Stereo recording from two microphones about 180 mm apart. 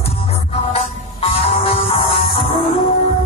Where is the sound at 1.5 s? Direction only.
30° left (ahead or behind).